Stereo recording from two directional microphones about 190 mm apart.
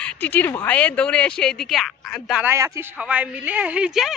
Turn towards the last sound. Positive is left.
turn(degrees=-5)  # may be behind; listen again after turning